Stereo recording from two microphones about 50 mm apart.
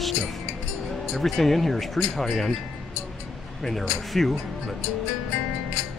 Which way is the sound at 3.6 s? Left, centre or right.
Centre.